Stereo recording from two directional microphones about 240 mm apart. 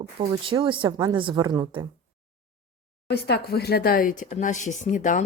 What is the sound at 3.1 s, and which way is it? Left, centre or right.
Speech, left.